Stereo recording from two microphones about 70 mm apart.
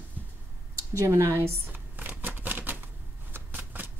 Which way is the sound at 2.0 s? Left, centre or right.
Right.